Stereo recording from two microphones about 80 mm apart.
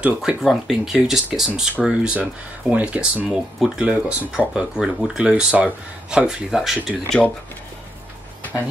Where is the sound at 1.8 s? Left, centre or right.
Centre.